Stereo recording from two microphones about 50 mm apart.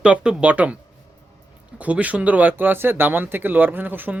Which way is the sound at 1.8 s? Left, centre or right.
Right.